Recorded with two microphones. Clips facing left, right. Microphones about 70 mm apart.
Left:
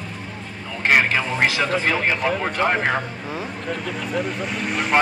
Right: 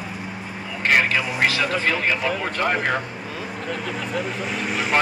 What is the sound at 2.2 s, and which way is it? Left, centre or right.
Speech, centre.